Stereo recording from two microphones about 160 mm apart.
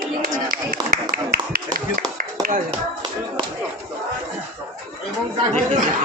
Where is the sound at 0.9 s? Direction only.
70° right (ahead or behind).